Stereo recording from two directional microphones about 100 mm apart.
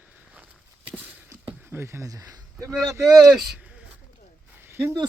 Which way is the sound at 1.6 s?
25° right (ahead or behind).